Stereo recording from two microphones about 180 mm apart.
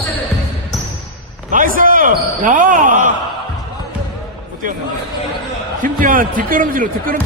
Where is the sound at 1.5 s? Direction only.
50° right (ahead or behind).